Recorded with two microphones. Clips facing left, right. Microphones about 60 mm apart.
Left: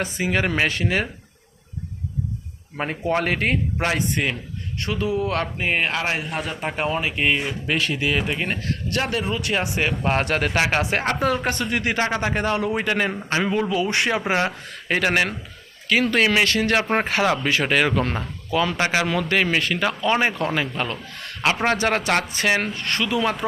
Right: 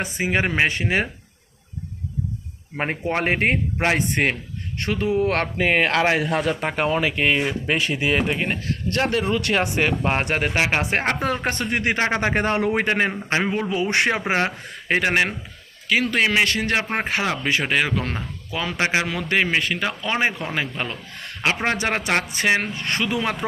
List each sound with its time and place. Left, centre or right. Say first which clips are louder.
0.0 s speech: even; right
2.7 s a man's voice: left 1 dB; right
5.5 s speech: right 4 dB; right
7.7 s speech: even; right
8.9 s a man's voice: right 3 dB; right
9.2 s speech: right 3 dB; right
9.6 s a man's voice: right 2 dB; right
10.1 s speech: left 1 dB; right
10.8 s a man's voice: even; right
14.3 s speech: even; right
15.9 s a man's voice: left 1 dB; centre
16.5 s speech: left 3 dB; right
17.6 s speech: left 2 dB; centre
18.5 s a man's voice: left 2 dB; centre; by 23.3 s right